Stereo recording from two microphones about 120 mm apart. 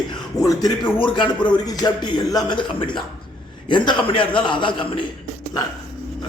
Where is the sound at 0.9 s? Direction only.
45° left (ahead or behind).